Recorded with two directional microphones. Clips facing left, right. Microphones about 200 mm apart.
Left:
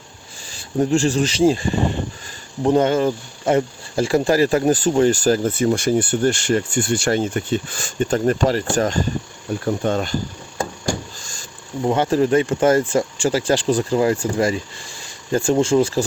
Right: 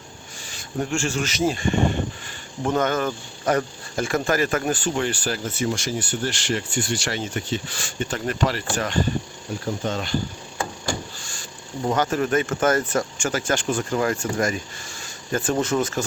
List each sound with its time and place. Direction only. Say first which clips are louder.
0.5 s speech: left 8 dB; 35° left (ahead or behind)
9.5 s speech: left 6 dB; 55° left (ahead or behind)
11.9 s speech: left 5 dB; 30° left (ahead or behind)